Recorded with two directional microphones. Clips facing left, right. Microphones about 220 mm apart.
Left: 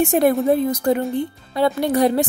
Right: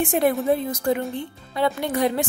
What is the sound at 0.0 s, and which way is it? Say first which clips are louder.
A woman's voice: left 4 dB; 40° left (ahead or behind).